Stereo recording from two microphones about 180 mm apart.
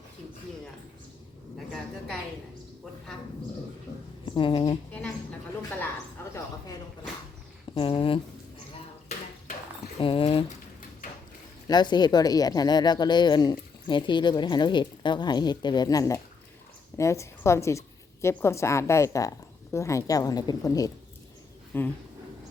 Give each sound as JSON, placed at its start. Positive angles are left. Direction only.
{"t": 1.5, "sound": "a sound", "side_deg": 0}
{"t": 4.4, "sound": "a woman's voice", "side_deg": 30}
{"t": 7.8, "sound": "a woman's voice", "side_deg": 30}
{"t": 10.0, "sound": "speech", "side_deg": 30}
{"t": 11.7, "sound": "a woman's voice", "side_deg": 25}